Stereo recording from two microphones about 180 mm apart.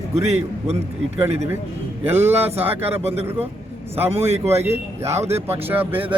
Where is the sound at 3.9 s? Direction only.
35° right (ahead or behind).